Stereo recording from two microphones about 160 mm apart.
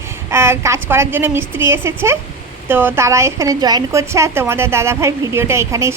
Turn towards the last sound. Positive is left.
turn(degrees=-15)  # may be behind; listen again after turning